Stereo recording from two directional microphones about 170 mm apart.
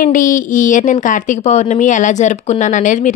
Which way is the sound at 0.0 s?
50° left (ahead or behind).